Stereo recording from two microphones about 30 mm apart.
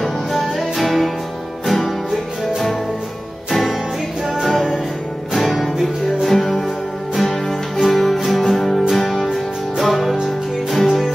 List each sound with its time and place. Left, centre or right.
0.0 s music: centre
4.5 s music: centre